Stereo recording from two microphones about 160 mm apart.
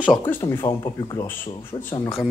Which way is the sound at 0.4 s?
35° left (ahead or behind).